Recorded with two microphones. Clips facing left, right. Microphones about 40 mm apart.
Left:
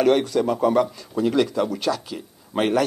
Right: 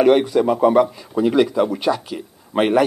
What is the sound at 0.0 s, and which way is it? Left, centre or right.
Speech, centre.